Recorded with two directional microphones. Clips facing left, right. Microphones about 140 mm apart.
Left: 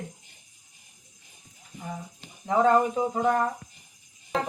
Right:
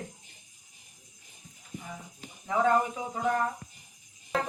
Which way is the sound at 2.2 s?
35° left (ahead or behind).